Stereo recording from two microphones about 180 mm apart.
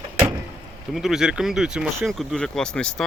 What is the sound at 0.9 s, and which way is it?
Speech, centre (ahead or behind).